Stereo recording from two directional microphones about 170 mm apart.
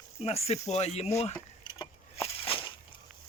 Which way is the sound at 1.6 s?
30° left (ahead or behind).